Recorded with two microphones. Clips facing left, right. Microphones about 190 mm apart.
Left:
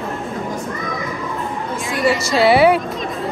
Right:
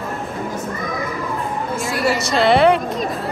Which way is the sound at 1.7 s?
Centre (ahead or behind).